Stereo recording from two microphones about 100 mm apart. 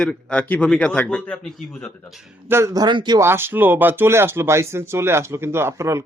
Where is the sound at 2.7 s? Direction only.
50° right (ahead or behind).